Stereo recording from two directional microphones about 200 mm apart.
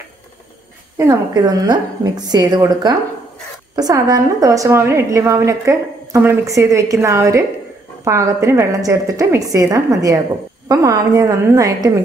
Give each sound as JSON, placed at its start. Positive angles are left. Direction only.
{"t": 0.9, "sound": "a woman's voice", "side_deg": -15}